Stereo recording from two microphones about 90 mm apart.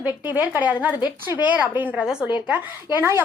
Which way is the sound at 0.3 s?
20° right (ahead or behind).